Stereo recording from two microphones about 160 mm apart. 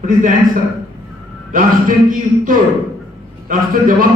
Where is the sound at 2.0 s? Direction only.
60° right (ahead or behind).